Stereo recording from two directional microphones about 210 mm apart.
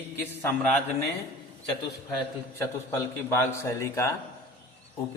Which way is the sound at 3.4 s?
15° left (ahead or behind).